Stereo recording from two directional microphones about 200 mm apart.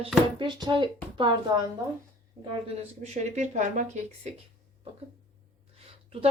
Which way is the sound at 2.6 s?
35° right (ahead or behind).